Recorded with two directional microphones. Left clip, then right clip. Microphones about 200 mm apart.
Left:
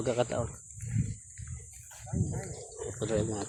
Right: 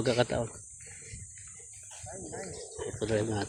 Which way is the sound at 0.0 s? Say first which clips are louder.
Right 2 dB; 15° right (ahead or behind).